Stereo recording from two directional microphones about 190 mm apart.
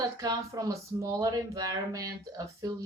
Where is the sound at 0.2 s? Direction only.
20° right (ahead or behind).